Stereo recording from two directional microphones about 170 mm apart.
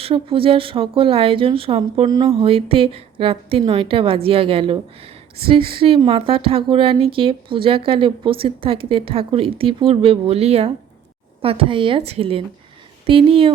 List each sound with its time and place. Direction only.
0.0 s speech: 30° right (ahead or behind)